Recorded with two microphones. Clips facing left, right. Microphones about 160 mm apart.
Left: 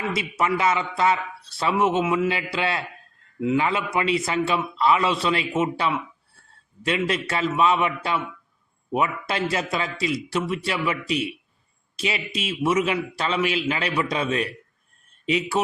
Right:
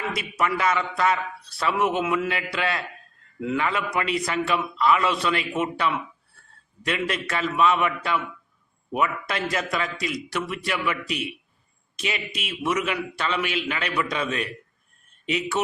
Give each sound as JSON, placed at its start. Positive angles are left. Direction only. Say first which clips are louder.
{"t": 0.1, "sound": "a man's voice", "louder": "left 3 dB", "side_deg": 25}
{"t": 3.4, "sound": "a man's voice", "louder": "left 3 dB", "side_deg": 20}